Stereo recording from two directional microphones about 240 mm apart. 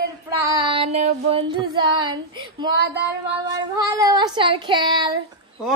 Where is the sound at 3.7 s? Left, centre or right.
Centre.